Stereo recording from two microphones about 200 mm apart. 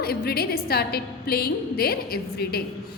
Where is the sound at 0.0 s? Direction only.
50° left (ahead or behind).